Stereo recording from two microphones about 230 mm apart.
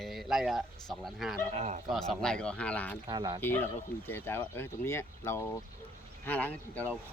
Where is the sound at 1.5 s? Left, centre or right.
Right.